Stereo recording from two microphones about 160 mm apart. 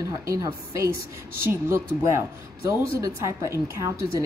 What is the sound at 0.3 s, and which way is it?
Speech, 20° right (ahead or behind).